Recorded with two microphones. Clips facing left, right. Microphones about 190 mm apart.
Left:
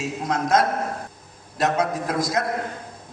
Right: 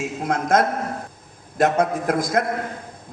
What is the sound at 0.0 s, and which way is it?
A man's voice, 55° right (ahead or behind).